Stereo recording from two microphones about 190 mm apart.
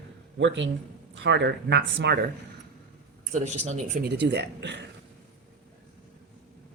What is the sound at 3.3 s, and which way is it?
Speech, 35° right (ahead or behind).